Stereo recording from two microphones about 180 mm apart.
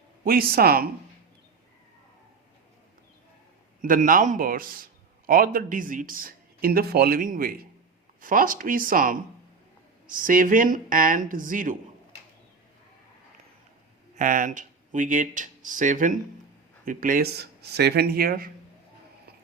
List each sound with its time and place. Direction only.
0.3 s speech: 55° right (ahead or behind)
3.8 s a man's voice: 50° right (ahead or behind)
14.2 s speech: 45° right (ahead or behind)